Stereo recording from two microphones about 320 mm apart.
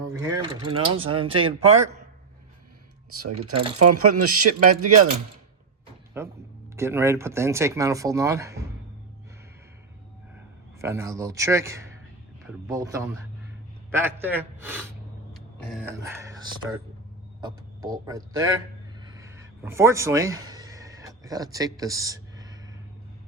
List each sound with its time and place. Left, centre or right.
0.0 s speech: centre
3.5 s speech: centre
3.8 s speech: right
6.2 s speech: centre
10.8 s speech: centre
18.9 s a sound: centre